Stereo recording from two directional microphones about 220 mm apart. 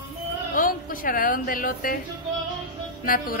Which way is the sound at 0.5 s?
40° left (ahead or behind).